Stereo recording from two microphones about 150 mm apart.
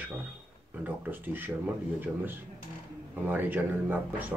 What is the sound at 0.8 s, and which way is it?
Speech, 10° right (ahead or behind).